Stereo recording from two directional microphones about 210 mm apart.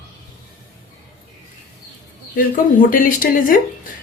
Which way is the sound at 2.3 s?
40° left (ahead or behind).